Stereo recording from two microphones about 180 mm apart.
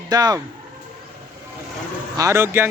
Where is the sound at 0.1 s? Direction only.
20° right (ahead or behind).